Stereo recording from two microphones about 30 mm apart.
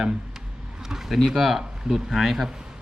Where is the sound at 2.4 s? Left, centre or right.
Centre.